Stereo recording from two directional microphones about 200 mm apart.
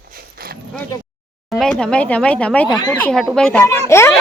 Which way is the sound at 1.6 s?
5° left (ahead or behind).